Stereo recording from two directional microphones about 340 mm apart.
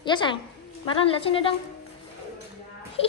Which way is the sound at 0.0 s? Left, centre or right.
Centre.